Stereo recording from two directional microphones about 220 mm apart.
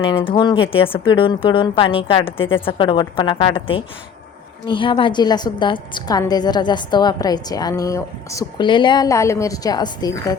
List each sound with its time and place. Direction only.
0.0 s a woman's voice: 25° left (ahead or behind)